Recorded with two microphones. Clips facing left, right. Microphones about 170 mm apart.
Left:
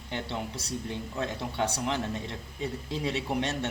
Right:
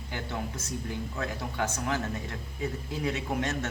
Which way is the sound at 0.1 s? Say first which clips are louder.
Left 1 dB; 25° left (ahead or behind).